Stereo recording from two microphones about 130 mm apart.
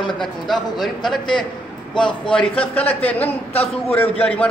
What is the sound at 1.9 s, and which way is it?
Speech, 35° left (ahead or behind).